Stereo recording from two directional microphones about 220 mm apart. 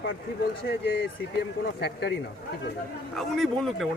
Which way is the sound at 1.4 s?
50° left (ahead or behind).